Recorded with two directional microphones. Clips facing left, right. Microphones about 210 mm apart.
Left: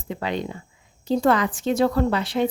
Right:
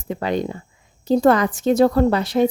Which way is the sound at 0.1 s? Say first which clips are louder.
Right 5 dB; 45° right (ahead or behind).